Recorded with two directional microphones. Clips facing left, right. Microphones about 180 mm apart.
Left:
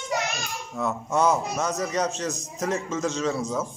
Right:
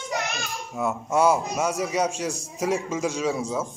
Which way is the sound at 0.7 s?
10° right (ahead or behind).